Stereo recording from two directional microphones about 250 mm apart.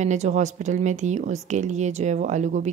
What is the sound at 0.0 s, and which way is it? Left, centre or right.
A woman's voice, right.